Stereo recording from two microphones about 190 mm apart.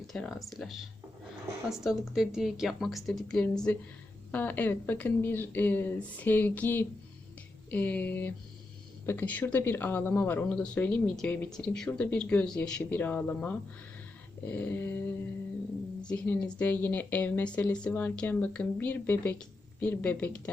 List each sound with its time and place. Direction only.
0.1 s a woman's voice: centre (ahead or behind)